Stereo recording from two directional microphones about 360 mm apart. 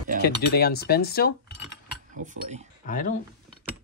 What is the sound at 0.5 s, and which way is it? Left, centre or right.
Speech, left.